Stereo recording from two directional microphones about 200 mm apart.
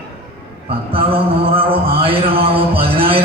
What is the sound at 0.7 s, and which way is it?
Mantra, 30° right (ahead or behind).